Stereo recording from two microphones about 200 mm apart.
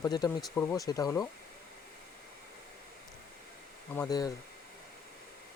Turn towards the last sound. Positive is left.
turn(degrees=20)  # may be behind; listen again after turning